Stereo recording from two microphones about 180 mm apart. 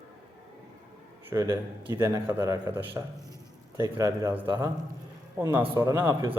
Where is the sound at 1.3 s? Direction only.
15° right (ahead or behind).